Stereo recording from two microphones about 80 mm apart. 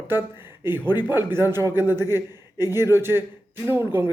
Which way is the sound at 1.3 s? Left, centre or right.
Right.